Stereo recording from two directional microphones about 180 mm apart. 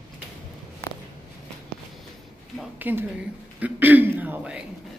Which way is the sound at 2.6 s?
10° right (ahead or behind).